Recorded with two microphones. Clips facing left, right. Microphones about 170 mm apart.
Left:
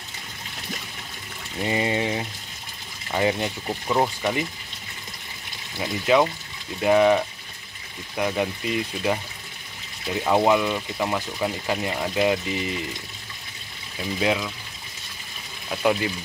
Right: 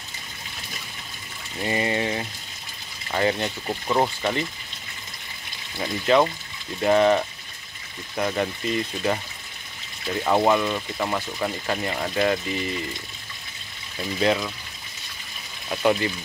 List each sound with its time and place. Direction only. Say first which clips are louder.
1.6 s speech: left 1 dB; 20° left (ahead or behind)
5.8 s speech: even; 10° left (ahead or behind)
13.9 s speech: right 1 dB; 5° left (ahead or behind)
15.7 s speech: right 1 dB; 5° left (ahead or behind)